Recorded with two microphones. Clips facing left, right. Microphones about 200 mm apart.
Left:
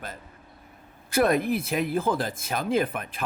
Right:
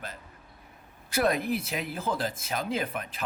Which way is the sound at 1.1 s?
50° left (ahead or behind).